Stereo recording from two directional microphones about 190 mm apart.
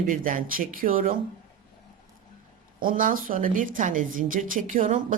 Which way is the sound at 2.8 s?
45° right (ahead or behind).